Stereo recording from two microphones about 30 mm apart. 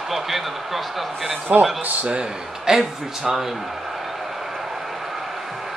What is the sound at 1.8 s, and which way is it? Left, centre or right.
Speech, right.